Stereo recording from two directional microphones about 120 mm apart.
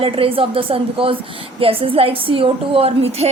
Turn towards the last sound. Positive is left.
turn(degrees=-60)  # may be behind; listen again after turning